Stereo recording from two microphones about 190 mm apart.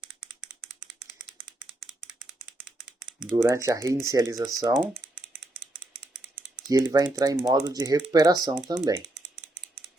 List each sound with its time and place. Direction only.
0.5 s rattle: 10° right (ahead or behind)
3.2 s speech: 10° right (ahead or behind)
4.8 s typing: centre (ahead or behind)
6.7 s speech: 20° right (ahead or behind)
9.0 s typing: centre (ahead or behind)